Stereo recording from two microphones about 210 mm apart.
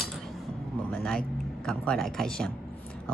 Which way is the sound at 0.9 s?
Centre (ahead or behind).